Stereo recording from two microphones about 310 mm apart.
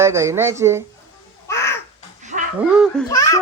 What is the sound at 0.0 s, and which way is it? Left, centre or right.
Speech, centre.